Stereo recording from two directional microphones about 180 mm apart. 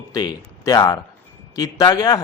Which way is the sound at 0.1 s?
20° left (ahead or behind).